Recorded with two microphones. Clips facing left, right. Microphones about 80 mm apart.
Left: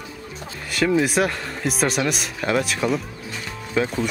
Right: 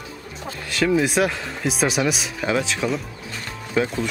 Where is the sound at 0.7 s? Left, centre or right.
Centre.